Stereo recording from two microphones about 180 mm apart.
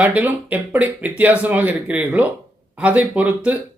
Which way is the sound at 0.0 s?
10° right (ahead or behind).